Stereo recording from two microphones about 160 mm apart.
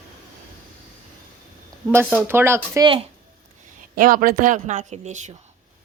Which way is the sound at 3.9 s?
60° right (ahead or behind).